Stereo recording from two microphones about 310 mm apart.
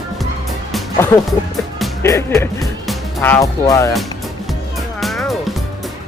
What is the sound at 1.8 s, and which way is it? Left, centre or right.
Speech, centre.